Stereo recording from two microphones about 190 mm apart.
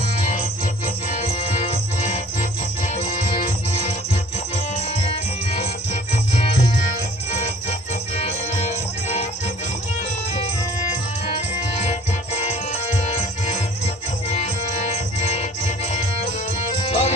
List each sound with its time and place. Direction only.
1.1 s music: 35° left (ahead or behind)
4.5 s music: 35° left (ahead or behind)
11.8 s music: 35° left (ahead or behind)
14.3 s music: 35° left (ahead or behind)